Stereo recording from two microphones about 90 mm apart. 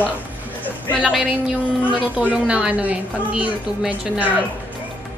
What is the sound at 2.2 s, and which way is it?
A woman's voice, 15° right (ahead or behind).